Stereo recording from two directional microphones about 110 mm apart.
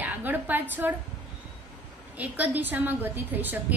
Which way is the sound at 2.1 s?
15° right (ahead or behind).